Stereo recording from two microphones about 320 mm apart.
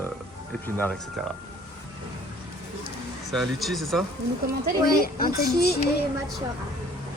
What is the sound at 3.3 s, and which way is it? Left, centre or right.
Speech, centre.